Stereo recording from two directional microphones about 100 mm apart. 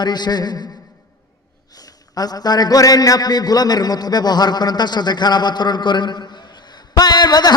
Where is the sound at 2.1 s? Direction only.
40° left (ahead or behind).